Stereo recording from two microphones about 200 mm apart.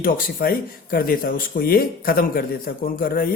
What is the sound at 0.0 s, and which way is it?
Speech, 45° left (ahead or behind).